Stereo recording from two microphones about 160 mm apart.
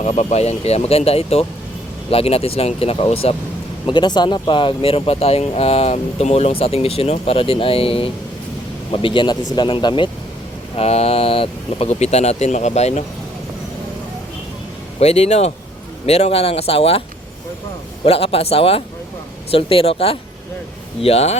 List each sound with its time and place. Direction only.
0.0 s speech: 45° left (ahead or behind)
3.8 s speech: 25° left (ahead or behind); by 13.1 s 45° left (ahead or behind)
14.9 s speech: 40° left (ahead or behind)
18.0 s speech: 35° left (ahead or behind)